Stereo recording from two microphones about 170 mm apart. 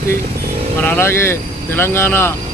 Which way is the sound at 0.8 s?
15° left (ahead or behind).